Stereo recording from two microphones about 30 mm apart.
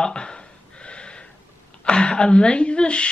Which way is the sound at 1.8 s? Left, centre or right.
Left.